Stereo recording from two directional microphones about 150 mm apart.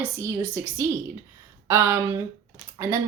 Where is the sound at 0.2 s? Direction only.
20° right (ahead or behind).